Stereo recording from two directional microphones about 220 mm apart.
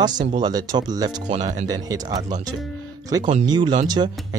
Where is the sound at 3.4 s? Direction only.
20° right (ahead or behind).